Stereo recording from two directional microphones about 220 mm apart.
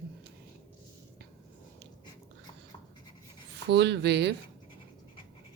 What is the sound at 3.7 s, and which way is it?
Speech, 50° right (ahead or behind).